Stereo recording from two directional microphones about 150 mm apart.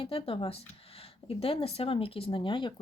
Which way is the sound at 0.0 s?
40° left (ahead or behind).